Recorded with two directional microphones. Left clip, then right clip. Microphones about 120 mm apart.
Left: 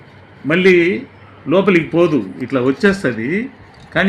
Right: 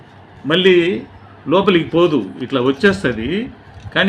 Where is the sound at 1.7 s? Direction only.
45° left (ahead or behind).